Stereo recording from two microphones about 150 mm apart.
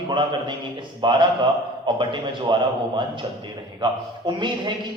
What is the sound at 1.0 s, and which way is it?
A man's voice, 30° right (ahead or behind).